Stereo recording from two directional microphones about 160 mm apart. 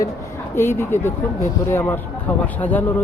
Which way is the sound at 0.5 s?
15° left (ahead or behind).